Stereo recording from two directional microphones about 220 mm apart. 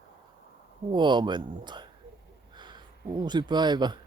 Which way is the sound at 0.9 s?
20° right (ahead or behind).